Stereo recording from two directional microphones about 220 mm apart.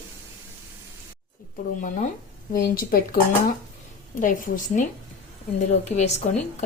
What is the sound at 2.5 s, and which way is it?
Speech, 40° left (ahead or behind).